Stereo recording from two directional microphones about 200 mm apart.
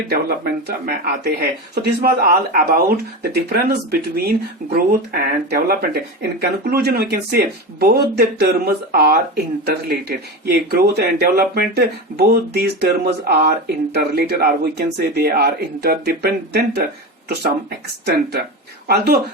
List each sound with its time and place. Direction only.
0.1 s speech: 50° right (ahead or behind)
18.0 s speech: 55° right (ahead or behind)